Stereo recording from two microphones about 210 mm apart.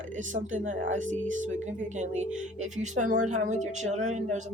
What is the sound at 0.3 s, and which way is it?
Speech, 35° right (ahead or behind).